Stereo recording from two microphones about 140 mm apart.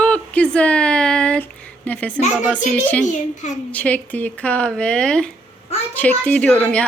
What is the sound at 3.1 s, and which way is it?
Speech, 55° left (ahead or behind).